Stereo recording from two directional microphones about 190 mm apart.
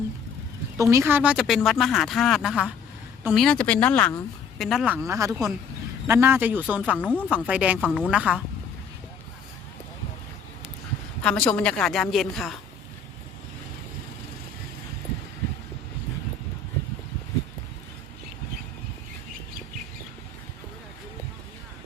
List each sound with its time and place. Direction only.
0.8 s speech: 15° right (ahead or behind)
4.9 s speech: 15° right (ahead or behind)
7.8 s speech: 5° left (ahead or behind)
11.2 s speech: 5° left (ahead or behind)